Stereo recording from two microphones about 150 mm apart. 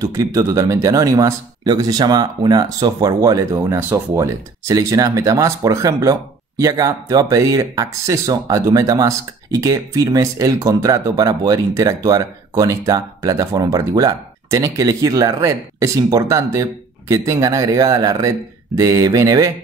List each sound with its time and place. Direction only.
0.0 s speech: 20° right (ahead or behind)